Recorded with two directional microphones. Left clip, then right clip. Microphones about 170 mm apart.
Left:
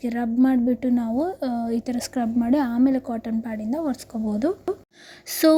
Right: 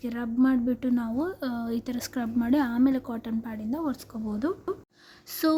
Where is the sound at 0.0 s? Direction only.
25° left (ahead or behind).